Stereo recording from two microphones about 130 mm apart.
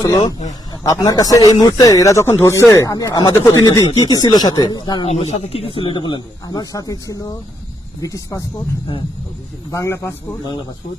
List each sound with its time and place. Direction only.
0.7 s a man's voice: 30° left (ahead or behind)
5.0 s a man's voice: 50° left (ahead or behind); by 8.4 s 25° left (ahead or behind)
9.7 s a man's voice: 25° left (ahead or behind)